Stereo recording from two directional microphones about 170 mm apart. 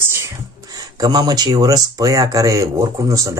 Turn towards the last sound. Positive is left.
turn(degrees=-20)  # may be behind; listen again after turning